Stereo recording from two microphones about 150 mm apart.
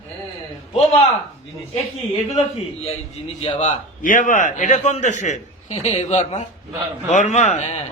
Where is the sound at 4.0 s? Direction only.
65° left (ahead or behind); by 7.8 s 45° left (ahead or behind).